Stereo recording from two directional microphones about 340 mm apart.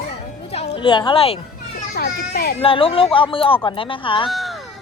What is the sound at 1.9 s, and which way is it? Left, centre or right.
Speech, left.